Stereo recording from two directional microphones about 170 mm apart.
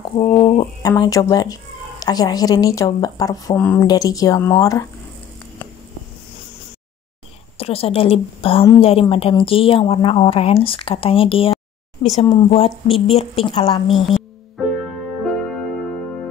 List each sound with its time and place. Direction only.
0.1 s speech: 30° left (ahead or behind)
3.5 s speech: 10° left (ahead or behind)
3.8 s speech: 20° left (ahead or behind)
7.5 s speech: 35° left (ahead or behind)
13.8 s music: centre (ahead or behind)